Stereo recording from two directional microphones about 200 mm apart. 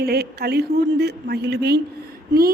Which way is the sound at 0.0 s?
50° right (ahead or behind).